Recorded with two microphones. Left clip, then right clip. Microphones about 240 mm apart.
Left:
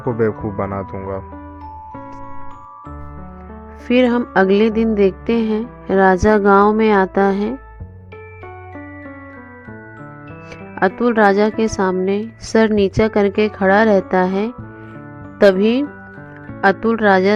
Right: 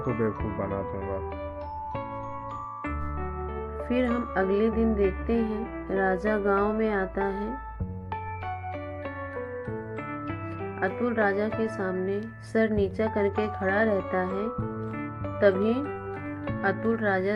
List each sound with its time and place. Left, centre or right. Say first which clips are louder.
0.2 s music: left 10 dB; left
3.8 s music: left 13 dB; left
10.8 s music: left 12 dB; left